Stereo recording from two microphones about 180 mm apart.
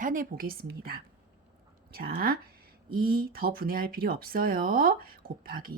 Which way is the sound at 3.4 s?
55° right (ahead or behind).